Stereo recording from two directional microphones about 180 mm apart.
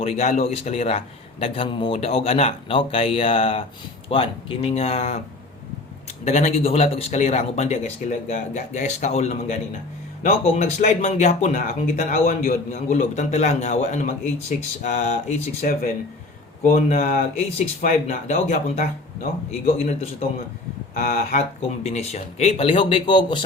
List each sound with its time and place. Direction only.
0.0 s a man's voice: 35° left (ahead or behind)
6.2 s a man's voice: 35° left (ahead or behind)
10.4 s a man's voice: 40° left (ahead or behind)
12.7 s a man's voice: 40° left (ahead or behind)
20.9 s speech: 55° left (ahead or behind)
21.8 s a man's voice: 35° left (ahead or behind)